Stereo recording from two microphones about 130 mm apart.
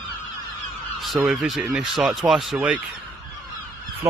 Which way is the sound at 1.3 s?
Centre (ahead or behind).